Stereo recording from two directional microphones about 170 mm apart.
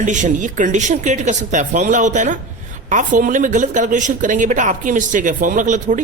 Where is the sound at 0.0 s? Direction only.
45° right (ahead or behind).